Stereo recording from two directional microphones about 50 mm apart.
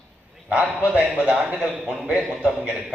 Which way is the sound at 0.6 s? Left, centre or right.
Centre.